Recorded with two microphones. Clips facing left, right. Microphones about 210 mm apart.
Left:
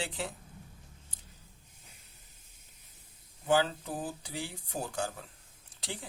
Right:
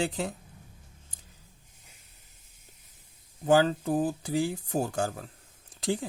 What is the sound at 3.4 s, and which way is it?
Speech, 45° right (ahead or behind).